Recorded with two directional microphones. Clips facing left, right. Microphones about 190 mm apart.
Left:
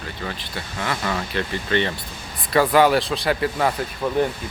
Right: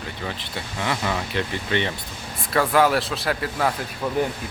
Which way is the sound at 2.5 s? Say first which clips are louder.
Left 3 dB; centre (ahead or behind).